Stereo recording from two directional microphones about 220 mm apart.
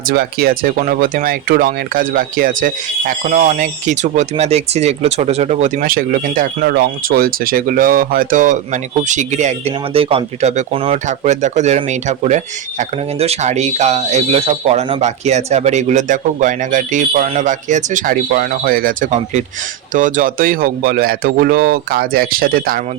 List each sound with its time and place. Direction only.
0.1 s speech: 45° right (ahead or behind)